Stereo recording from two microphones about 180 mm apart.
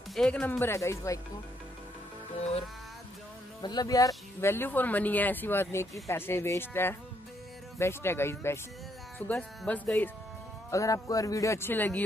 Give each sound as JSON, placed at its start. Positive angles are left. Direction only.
{"t": 0.1, "sound": "speech", "side_deg": 5}
{"t": 3.6, "sound": "speech", "side_deg": 20}